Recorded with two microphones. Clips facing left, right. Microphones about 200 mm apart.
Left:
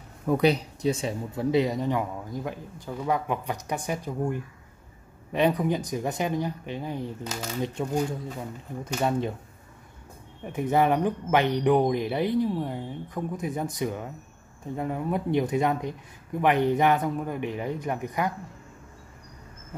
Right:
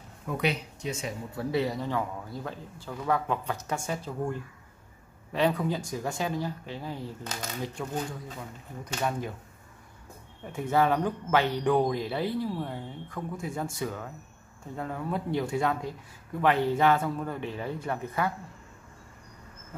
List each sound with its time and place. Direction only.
0.3 s speech: 35° left (ahead or behind)
1.3 s speech: 20° left (ahead or behind)
10.4 s speech: 20° left (ahead or behind)